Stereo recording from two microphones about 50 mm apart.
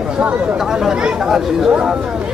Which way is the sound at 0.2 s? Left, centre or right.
Right.